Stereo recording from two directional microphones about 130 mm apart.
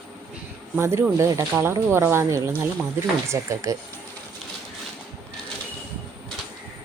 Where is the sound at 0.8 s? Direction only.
20° right (ahead or behind).